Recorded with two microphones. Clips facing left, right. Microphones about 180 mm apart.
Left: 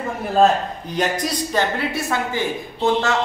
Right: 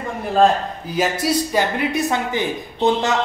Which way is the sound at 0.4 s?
5° right (ahead or behind).